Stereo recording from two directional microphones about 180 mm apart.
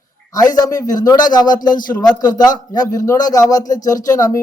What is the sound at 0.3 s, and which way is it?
A man's voice, 20° left (ahead or behind).